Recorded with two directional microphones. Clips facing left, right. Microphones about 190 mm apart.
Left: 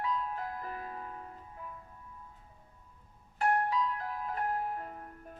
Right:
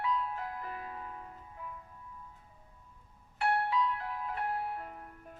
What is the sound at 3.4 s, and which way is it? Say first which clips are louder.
Music: left 1 dB; 40° left (ahead or behind).